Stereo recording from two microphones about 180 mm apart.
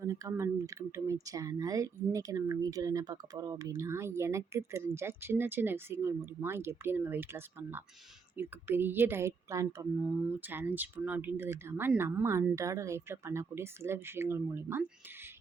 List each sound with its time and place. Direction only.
0.0 s speech: 15° right (ahead or behind)